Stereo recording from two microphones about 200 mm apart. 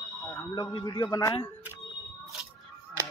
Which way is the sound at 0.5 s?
20° left (ahead or behind).